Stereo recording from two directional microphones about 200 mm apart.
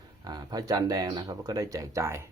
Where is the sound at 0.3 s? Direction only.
20° right (ahead or behind).